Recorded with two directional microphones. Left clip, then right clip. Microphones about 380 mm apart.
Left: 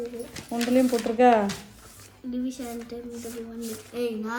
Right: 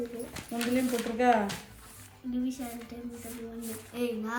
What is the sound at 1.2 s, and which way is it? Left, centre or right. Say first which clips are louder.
Speech: left 7 dB; left.